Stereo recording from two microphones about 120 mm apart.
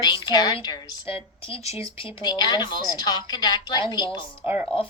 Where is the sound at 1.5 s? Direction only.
60° left (ahead or behind).